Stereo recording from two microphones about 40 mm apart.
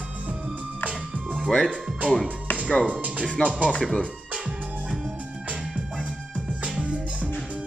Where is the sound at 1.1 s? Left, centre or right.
Right.